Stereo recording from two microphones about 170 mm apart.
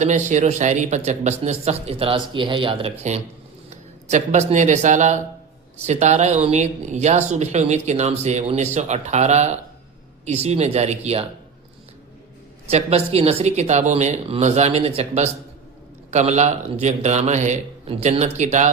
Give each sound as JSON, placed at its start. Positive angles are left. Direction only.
{"t": 0.0, "sound": "speech", "side_deg": -45}
{"t": 3.7, "sound": "speech", "side_deg": -40}
{"t": 12.7, "sound": "a man's voice", "side_deg": -40}